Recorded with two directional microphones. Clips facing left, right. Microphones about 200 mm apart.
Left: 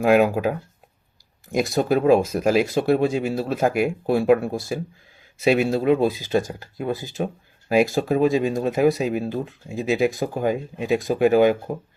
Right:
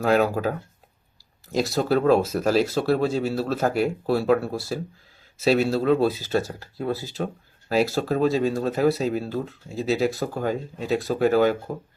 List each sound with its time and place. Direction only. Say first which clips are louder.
0.0 s speech: left 3 dB; 15° left (ahead or behind)
1.5 s speech: left 2 dB; 15° left (ahead or behind)